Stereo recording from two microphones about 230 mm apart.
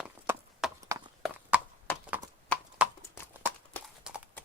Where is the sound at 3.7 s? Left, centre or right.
Centre.